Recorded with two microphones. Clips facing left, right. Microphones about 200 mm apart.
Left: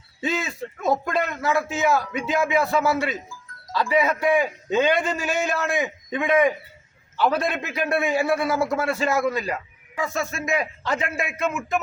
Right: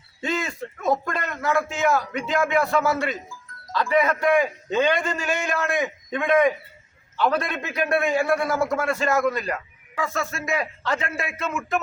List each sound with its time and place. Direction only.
0.2 s a man's voice: 5° left (ahead or behind)
9.9 s a man's voice: 20° left (ahead or behind)